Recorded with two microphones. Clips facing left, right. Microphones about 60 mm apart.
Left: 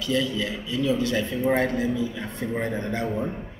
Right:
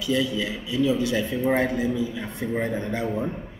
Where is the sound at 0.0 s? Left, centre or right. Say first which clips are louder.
Right 1 dB; centre.